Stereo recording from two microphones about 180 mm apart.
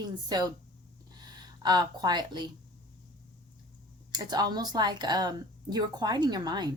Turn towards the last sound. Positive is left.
turn(degrees=-25)  # may be behind; listen again after turning